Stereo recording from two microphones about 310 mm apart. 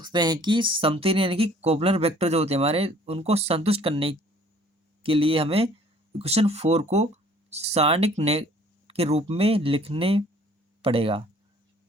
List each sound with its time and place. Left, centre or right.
0.0 s speech: centre